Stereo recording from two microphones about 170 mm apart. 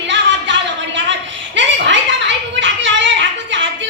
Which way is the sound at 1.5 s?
90° right.